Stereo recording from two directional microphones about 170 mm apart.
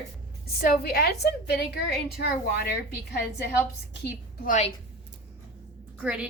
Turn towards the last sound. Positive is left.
turn(degrees=-5)  # may be behind; listen again after turning